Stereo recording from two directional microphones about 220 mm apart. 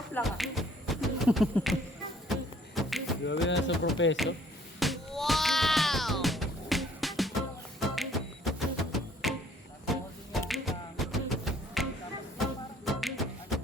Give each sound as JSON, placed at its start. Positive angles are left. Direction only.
{"t": 0.1, "sound": "a sound", "side_deg": 0}
{"t": 2.3, "sound": "music", "side_deg": 0}
{"t": 3.2, "sound": "speech", "side_deg": 55}
{"t": 4.8, "sound": "music", "side_deg": 0}